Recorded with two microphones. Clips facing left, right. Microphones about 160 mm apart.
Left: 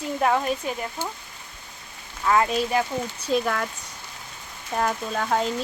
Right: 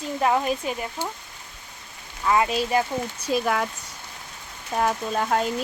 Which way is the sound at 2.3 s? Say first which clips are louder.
Even; 5° right (ahead or behind).